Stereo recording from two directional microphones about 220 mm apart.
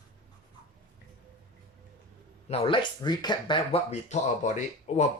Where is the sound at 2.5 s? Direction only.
25° left (ahead or behind).